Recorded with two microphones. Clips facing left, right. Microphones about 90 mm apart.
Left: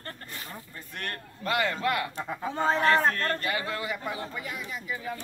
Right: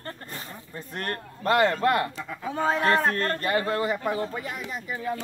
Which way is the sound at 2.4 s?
5° right (ahead or behind).